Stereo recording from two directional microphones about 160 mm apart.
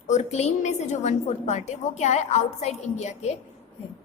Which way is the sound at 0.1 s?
45° left (ahead or behind).